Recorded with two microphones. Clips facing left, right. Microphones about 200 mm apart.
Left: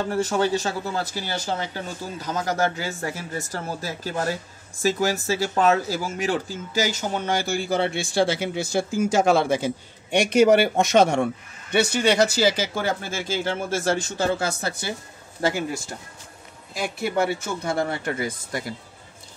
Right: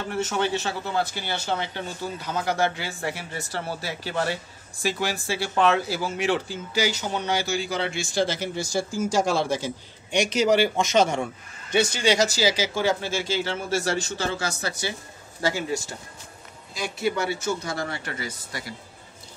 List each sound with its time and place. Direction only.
0.1 s speech: 40° left (ahead or behind)